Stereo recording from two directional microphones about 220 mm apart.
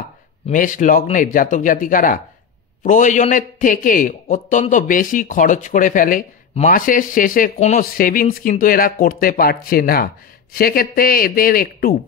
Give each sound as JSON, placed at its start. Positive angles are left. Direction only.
{"t": 0.5, "sound": "a man's voice", "side_deg": 35}